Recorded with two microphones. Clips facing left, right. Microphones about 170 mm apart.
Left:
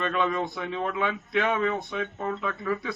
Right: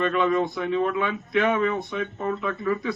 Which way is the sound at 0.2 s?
20° right (ahead or behind).